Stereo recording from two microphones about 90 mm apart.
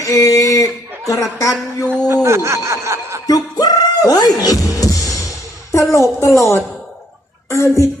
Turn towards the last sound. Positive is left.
turn(degrees=35)  # may be behind; listen again after turning